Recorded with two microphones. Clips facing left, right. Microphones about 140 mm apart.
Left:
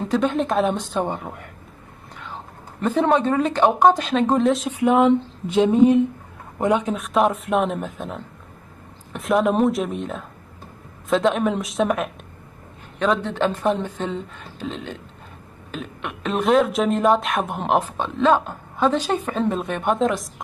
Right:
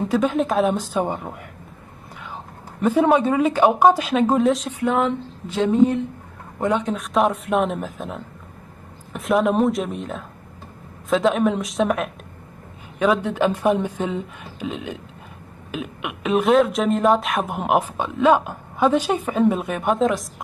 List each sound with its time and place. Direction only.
0.0 s speech: 5° right (ahead or behind)
2.8 s speech: 5° right (ahead or behind)
4.6 s speech: 15° left (ahead or behind)
7.0 s speech: centre (ahead or behind)